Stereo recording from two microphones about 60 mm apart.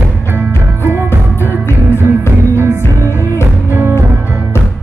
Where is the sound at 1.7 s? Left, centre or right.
Left.